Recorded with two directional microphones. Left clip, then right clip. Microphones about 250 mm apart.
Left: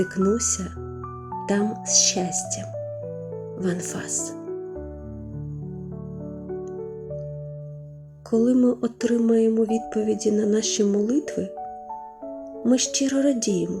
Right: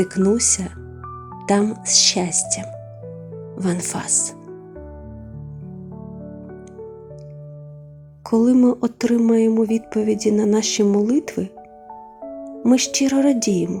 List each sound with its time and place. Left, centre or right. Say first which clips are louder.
0.0 s speech: right 4 dB; centre
8.3 s speech: right 4 dB; centre
12.6 s speech: right 4 dB; centre